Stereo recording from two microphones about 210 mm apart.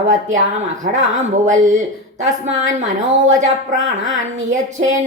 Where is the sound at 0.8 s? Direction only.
35° right (ahead or behind).